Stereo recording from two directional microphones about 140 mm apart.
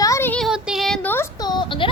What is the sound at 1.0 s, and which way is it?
Speech, 15° left (ahead or behind).